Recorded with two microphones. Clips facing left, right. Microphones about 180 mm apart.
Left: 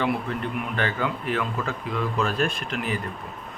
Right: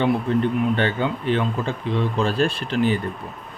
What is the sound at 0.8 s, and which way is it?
Speech, 25° right (ahead or behind).